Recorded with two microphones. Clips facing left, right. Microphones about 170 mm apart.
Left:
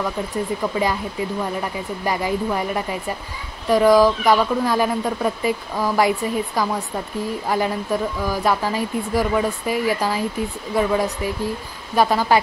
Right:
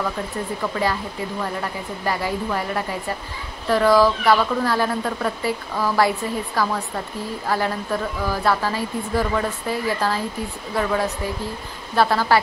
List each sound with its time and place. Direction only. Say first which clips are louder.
0.3 s speech: left 3 dB; 15° left (ahead or behind)